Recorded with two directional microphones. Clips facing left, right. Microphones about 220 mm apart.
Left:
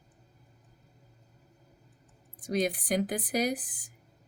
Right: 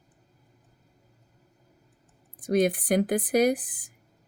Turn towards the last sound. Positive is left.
turn(degrees=-55)  # may be behind; listen again after turning